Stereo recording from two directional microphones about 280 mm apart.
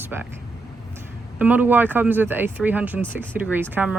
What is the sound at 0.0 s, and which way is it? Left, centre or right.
Speech, centre.